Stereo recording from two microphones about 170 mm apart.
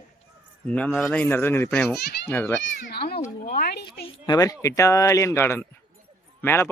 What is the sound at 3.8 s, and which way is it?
Speech, 25° left (ahead or behind).